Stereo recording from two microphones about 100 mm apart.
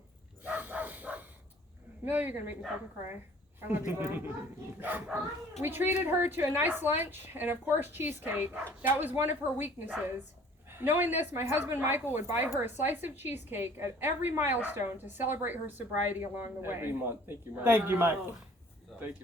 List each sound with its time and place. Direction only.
0.4 s dog: 15° right (ahead or behind)
2.0 s speech: 20° right (ahead or behind)
3.7 s a woman's voice: 20° right (ahead or behind)